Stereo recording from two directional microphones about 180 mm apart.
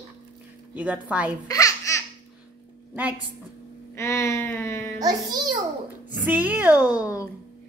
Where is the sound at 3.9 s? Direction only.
15° left (ahead or behind).